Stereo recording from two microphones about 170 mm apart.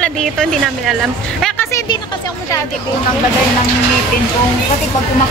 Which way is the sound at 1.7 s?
25° left (ahead or behind).